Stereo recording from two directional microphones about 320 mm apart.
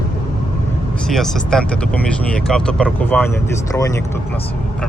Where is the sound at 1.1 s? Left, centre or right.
Centre.